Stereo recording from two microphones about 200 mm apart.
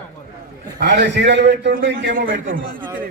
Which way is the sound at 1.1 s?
60° right (ahead or behind).